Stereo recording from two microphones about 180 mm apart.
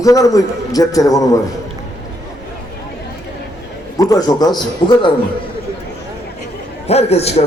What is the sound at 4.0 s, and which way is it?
A man's voice, 20° left (ahead or behind).